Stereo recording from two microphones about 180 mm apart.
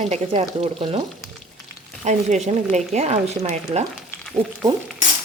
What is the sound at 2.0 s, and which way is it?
Speech, 40° right (ahead or behind).